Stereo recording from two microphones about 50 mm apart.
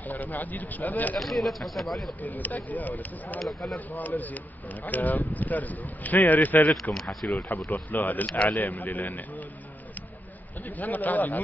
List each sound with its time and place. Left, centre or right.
0.0 s a man's voice: left
1.2 s speech: centre
2.2 s a man's voice: left
6.7 s speech: centre
7.5 s a man's voice: left
10.6 s a man's voice: left